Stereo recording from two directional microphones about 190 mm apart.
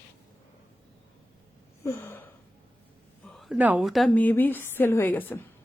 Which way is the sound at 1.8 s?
15° left (ahead or behind).